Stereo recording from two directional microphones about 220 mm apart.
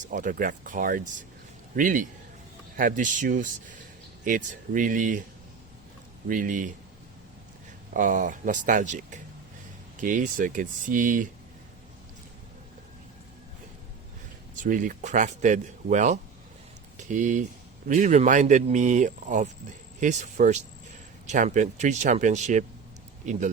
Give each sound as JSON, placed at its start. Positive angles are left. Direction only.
{"t": 0.0, "sound": "speech", "side_deg": -35}
{"t": 6.2, "sound": "speech", "side_deg": -35}
{"t": 7.9, "sound": "speech", "side_deg": -35}
{"t": 14.6, "sound": "speech", "side_deg": -35}